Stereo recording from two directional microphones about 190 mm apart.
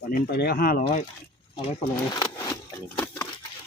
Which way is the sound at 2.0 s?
20° left (ahead or behind).